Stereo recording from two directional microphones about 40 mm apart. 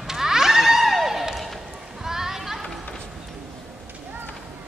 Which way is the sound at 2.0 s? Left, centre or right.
Centre.